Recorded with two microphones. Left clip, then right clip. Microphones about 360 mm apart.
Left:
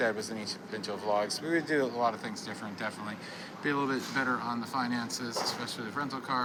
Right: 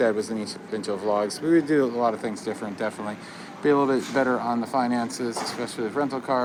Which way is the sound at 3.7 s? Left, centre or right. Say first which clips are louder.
Right 10 dB; centre.